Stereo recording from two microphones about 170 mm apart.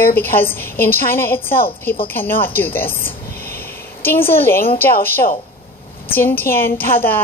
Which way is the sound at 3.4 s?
60° left (ahead or behind).